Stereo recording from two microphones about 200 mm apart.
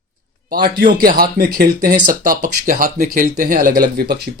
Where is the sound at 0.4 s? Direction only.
50° right (ahead or behind).